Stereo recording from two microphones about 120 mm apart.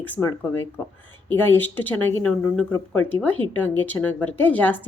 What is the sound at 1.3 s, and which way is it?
Speech, 15° left (ahead or behind).